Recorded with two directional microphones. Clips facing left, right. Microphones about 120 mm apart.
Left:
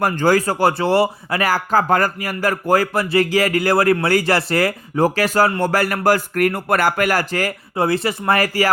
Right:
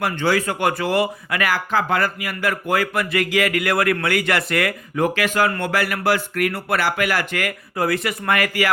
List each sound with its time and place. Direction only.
0.0 s speech: 40° left (ahead or behind)